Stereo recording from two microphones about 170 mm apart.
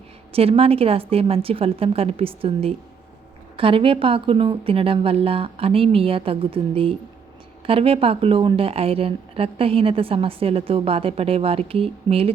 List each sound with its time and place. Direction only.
0.3 s a woman's voice: 35° right (ahead or behind)